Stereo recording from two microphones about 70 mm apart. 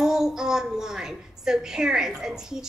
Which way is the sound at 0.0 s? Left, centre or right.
Centre.